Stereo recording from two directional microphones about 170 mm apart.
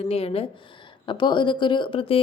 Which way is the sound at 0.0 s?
35° left (ahead or behind).